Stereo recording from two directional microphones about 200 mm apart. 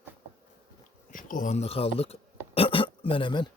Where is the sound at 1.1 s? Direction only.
40° left (ahead or behind); by 3.4 s 25° left (ahead or behind).